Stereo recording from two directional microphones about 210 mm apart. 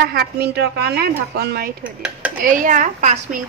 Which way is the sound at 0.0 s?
50° right (ahead or behind).